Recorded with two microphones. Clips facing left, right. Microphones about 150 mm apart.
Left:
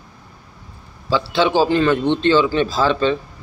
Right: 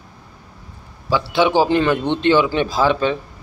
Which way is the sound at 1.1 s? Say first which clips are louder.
Right 1 dB; 15° right (ahead or behind).